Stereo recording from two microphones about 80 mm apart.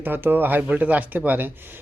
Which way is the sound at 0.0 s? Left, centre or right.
Right.